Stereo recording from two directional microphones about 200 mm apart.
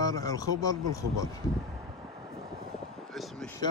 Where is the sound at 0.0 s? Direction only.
20° left (ahead or behind).